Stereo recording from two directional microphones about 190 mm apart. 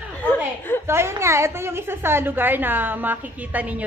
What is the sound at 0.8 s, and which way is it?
A woman's voice, 15° right (ahead or behind).